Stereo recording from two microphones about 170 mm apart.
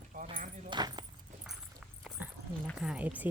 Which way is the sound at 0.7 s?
25° right (ahead or behind).